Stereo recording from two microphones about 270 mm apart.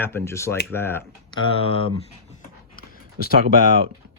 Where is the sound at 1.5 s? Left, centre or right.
Left.